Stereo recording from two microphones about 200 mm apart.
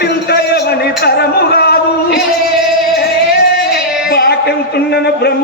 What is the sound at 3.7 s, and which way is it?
Speech, 50° left (ahead or behind).